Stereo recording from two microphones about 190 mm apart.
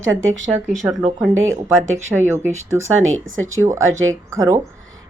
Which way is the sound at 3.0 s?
90° right.